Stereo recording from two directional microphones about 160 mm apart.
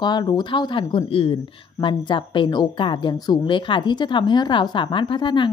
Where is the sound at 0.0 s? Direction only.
25° left (ahead or behind).